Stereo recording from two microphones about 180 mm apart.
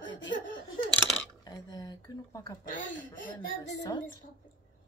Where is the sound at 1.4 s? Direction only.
20° left (ahead or behind).